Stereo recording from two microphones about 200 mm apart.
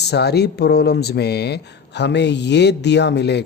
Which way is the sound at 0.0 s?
55° left (ahead or behind).